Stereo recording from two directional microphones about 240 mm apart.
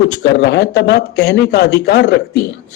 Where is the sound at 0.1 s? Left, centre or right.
Left.